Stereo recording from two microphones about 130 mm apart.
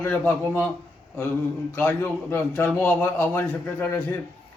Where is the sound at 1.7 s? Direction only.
15° left (ahead or behind).